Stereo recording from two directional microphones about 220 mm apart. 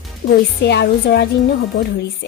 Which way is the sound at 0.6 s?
50° left (ahead or behind).